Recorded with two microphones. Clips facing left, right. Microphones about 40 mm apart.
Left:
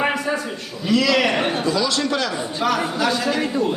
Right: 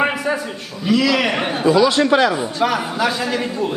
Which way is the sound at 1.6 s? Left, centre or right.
Right.